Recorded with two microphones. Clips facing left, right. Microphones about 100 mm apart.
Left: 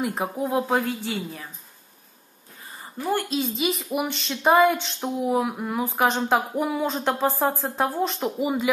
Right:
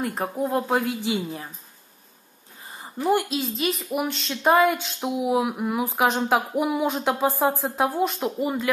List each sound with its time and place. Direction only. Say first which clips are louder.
0.0 s speech: even; 5° left (ahead or behind)
0.8 s a woman's voice: right 3 dB; 15° right (ahead or behind)
2.8 s a sound: right 4 dB; 15° right (ahead or behind)
3.3 s speech: left 1 dB; centre (ahead or behind)